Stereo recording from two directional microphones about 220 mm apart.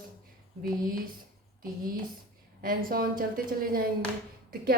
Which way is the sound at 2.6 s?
40° right (ahead or behind).